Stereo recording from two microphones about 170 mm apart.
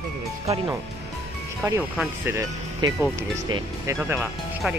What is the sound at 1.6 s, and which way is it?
Speech, 10° right (ahead or behind).